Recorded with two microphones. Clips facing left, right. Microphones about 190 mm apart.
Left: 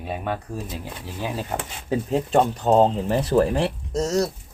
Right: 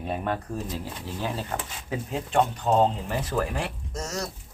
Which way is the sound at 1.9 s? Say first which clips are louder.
Left 7 dB; 35° left (ahead or behind).